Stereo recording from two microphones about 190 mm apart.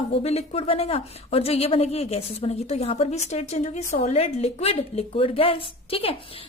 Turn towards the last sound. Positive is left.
turn(degrees=30)  # may be behind; listen again after turning